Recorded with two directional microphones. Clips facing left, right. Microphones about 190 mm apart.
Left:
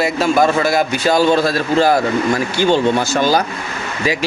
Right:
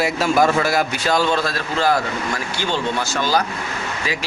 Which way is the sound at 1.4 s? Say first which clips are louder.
Left 7 dB; 35° left (ahead or behind).